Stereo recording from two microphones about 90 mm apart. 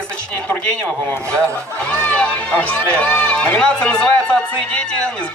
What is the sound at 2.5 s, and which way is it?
A man's voice, 15° left (ahead or behind).